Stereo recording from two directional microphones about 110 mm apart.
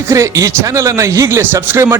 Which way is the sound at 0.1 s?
25° right (ahead or behind).